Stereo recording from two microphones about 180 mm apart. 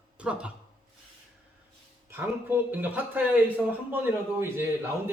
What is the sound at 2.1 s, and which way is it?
A man's voice, 10° right (ahead or behind).